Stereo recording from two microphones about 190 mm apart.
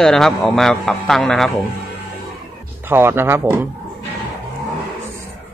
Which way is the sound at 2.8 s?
10° right (ahead or behind).